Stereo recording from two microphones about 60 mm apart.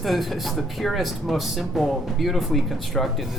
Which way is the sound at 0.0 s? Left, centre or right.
Centre.